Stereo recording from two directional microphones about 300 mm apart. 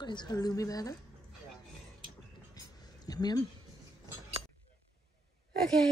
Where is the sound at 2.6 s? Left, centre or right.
Centre.